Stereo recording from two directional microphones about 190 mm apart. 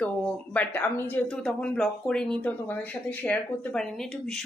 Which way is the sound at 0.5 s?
10° left (ahead or behind).